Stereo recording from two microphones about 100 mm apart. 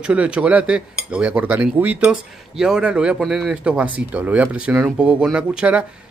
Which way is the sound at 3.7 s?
15° right (ahead or behind).